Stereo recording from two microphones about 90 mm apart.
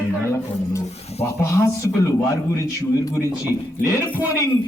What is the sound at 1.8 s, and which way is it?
Speech, 45° left (ahead or behind).